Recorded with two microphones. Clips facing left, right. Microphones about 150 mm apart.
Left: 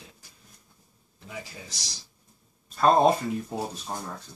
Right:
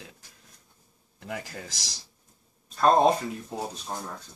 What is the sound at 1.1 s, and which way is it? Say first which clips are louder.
Speech: right 4 dB; 65° right (ahead or behind).